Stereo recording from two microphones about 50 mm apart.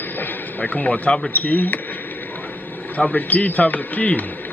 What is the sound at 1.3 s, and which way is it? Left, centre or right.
Speech, left.